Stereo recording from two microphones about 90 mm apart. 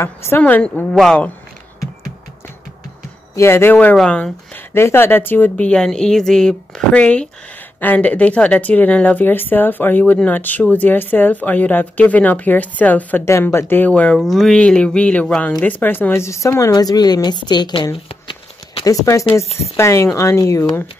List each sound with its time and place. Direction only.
0.0 s speech: 30° left (ahead or behind)
0.4 s speech: 15° left (ahead or behind)
3.3 s speech: 30° left (ahead or behind)
3.9 s speech: 10° left (ahead or behind)
4.7 s speech: 25° left (ahead or behind)
13.2 s speech: 30° left (ahead or behind); by 14.1 s 15° left (ahead or behind)
14.1 s speech: centre (ahead or behind); by 17.7 s 55° left (ahead or behind)
18.0 s a sound: 85° left
18.9 s speech: 35° left (ahead or behind)